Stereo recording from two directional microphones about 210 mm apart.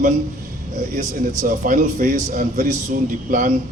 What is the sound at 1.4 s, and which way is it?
A man's voice, 40° right (ahead or behind).